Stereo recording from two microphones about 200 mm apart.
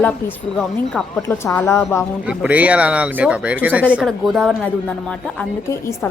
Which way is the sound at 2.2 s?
5° right (ahead or behind).